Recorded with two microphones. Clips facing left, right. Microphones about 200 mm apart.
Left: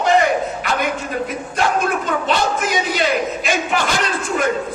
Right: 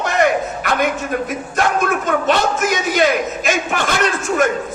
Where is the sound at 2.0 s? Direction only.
45° right (ahead or behind).